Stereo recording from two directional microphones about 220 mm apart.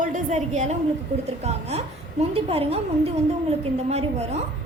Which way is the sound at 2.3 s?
25° right (ahead or behind).